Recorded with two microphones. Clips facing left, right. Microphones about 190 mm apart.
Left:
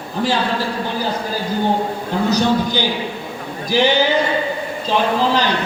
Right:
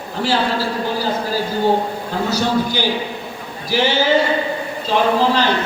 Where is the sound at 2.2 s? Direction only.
15° left (ahead or behind).